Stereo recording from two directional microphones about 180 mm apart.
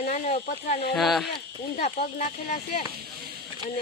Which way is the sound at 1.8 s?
35° left (ahead or behind).